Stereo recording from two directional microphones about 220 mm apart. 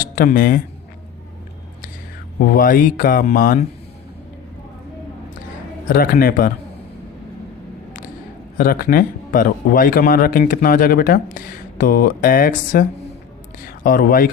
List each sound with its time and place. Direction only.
0.0 s speech: 40° left (ahead or behind)
2.4 s speech: 40° left (ahead or behind)
5.9 s speech: 40° left (ahead or behind)
8.5 s speech: 40° left (ahead or behind)